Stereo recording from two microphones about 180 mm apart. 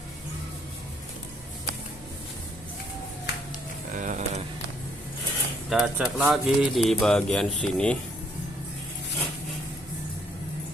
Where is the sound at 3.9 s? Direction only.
45° right (ahead or behind).